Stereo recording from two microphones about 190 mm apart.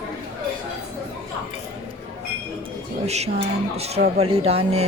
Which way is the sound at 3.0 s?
35° right (ahead or behind).